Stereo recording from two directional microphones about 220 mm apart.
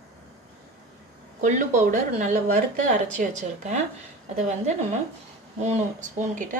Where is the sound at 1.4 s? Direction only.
35° right (ahead or behind).